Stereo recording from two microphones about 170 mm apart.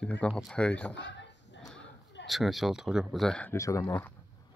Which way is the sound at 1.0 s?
90° left.